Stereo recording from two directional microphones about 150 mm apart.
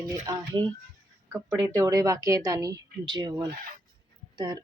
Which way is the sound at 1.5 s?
25° right (ahead or behind).